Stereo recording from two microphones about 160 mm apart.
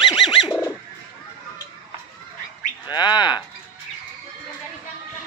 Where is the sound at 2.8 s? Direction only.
25° left (ahead or behind).